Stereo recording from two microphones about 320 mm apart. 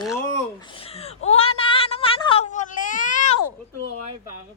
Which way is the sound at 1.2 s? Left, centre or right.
Centre.